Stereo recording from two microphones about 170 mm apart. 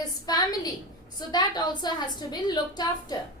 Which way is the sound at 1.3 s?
25° left (ahead or behind).